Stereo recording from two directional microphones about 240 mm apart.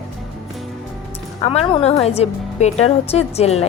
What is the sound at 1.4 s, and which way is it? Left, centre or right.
Speech, left.